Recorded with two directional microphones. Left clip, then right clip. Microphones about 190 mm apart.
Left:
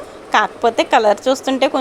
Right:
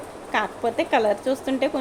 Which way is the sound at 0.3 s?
30° left (ahead or behind).